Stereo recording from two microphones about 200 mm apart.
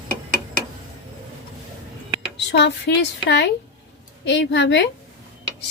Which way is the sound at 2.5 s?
60° left (ahead or behind).